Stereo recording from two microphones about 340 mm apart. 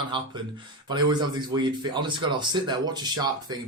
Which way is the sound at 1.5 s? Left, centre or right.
Centre.